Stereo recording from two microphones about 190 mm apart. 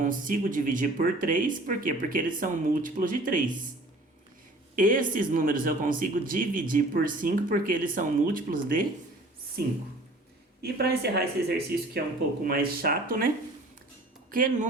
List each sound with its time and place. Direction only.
0.0 s speech: 45° right (ahead or behind)
4.7 s speech: 45° right (ahead or behind)
10.8 s speech: 55° right (ahead or behind)